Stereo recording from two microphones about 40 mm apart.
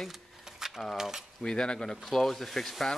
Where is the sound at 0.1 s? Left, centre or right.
Centre.